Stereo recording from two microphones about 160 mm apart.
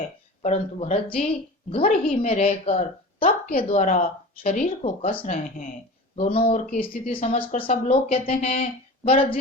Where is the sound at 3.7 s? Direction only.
50° left (ahead or behind).